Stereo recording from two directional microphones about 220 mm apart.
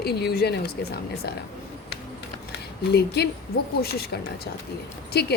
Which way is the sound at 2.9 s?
50° left (ahead or behind).